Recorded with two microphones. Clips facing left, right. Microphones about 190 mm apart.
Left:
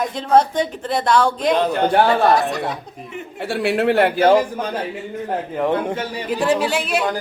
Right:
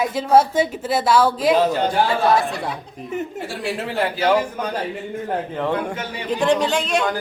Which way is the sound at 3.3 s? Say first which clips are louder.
Left 6 dB; 65° left (ahead or behind).